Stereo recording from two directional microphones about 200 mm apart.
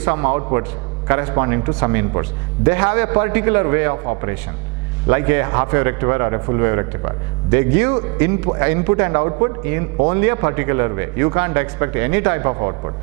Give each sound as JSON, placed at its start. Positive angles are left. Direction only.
{"t": 0.0, "sound": "a man's voice", "side_deg": -15}